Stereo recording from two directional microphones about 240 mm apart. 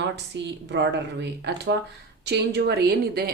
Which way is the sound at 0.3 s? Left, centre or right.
Right.